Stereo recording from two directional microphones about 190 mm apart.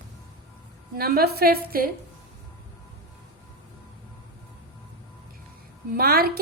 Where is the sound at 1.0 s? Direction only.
55° right (ahead or behind).